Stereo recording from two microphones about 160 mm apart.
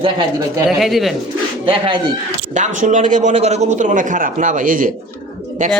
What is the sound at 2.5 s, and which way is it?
A man's voice, 50° right (ahead or behind).